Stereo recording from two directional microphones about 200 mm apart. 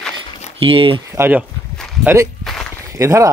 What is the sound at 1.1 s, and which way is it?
Speech, 10° right (ahead or behind).